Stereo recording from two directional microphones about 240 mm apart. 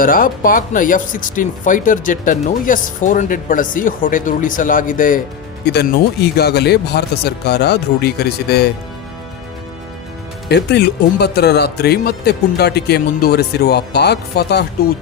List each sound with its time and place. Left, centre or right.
0.0 s speech: left
10.5 s speech: left